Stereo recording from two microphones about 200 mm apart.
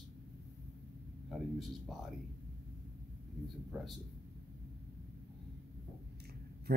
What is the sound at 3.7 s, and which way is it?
Speech, 5° right (ahead or behind).